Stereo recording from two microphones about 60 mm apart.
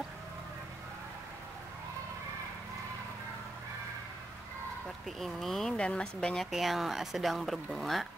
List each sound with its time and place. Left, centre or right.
5.0 s speech: centre
5.8 s speech: centre
6.3 s speech: centre